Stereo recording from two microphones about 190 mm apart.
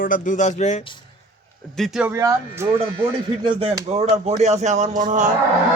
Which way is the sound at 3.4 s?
30° right (ahead or behind).